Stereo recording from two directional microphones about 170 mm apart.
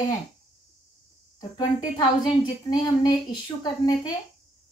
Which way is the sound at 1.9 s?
25° left (ahead or behind).